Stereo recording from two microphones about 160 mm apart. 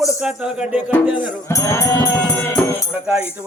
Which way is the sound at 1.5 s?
20° left (ahead or behind).